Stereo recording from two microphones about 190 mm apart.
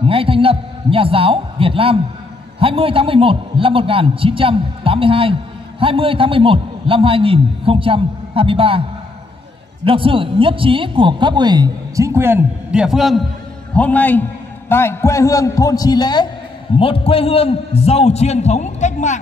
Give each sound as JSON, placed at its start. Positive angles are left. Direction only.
{"t": 0.0, "sound": "a man's voice", "side_deg": -30}
{"t": 9.8, "sound": "a man's voice", "side_deg": -25}